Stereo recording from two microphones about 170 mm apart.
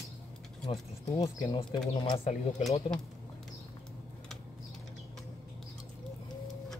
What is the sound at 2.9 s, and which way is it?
Speech, 5° left (ahead or behind).